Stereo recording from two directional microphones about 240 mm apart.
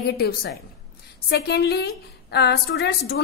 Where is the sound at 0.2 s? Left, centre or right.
Left.